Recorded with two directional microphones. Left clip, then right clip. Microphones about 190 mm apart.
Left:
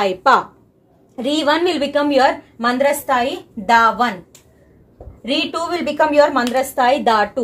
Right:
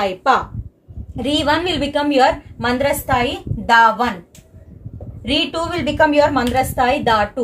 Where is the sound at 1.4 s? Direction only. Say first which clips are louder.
Left 2 dB; 20° left (ahead or behind).